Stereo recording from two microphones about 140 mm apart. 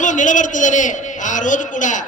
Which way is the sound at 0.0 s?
65° left (ahead or behind).